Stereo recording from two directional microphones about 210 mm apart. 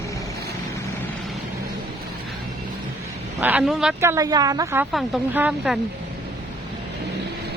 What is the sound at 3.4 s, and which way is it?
Speech, 5° right (ahead or behind).